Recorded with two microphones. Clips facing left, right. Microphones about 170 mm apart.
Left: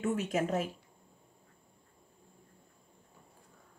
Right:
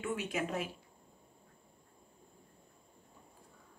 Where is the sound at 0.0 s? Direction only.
40° left (ahead or behind).